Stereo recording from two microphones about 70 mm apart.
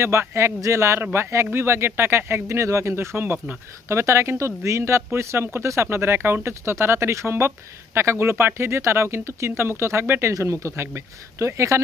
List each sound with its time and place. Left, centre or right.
0.0 s speech: right